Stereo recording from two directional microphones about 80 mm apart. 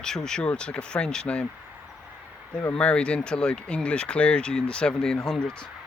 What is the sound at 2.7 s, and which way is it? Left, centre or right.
Speech, centre.